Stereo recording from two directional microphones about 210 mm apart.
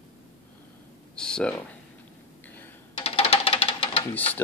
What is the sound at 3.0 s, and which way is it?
Music, 30° left (ahead or behind).